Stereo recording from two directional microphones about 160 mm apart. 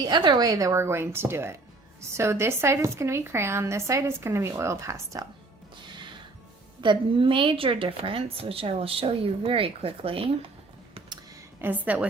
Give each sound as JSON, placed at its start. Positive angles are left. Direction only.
{"t": 0.0, "sound": "a woman's voice", "side_deg": -25}
{"t": 6.8, "sound": "a woman's voice", "side_deg": -30}
{"t": 11.6, "sound": "a woman's voice", "side_deg": -10}